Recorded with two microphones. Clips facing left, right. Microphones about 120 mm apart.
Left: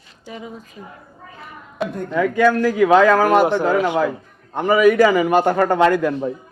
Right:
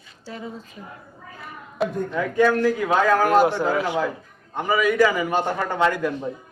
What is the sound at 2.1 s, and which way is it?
A man's voice, 90° left.